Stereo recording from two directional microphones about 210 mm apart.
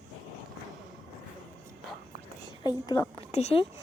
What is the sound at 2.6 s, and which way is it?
Speech, 15° left (ahead or behind).